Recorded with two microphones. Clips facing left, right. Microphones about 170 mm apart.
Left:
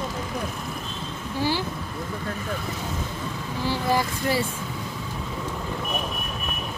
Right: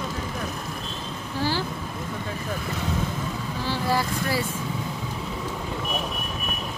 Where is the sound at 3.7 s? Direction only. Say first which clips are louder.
Left 1 dB; 20° left (ahead or behind).